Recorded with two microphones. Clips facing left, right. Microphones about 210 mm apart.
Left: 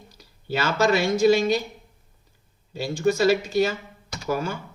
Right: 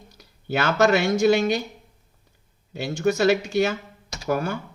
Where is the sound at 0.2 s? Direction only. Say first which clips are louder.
Right 2 dB; 55° right (ahead or behind).